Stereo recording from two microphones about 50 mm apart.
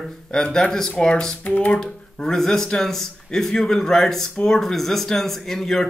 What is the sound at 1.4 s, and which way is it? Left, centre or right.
Speech, left.